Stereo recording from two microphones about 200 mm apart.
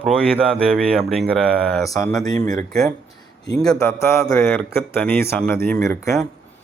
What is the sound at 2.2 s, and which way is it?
Speech, 20° left (ahead or behind).